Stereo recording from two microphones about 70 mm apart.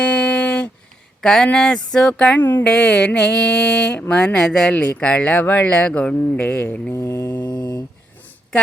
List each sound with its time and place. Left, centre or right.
0.0 s a sound: centre
1.2 s speech: centre
1.5 s mantra: centre
2.4 s speech: left
2.6 s mantra: centre
4.8 s speech: centre
7.3 s mantra: left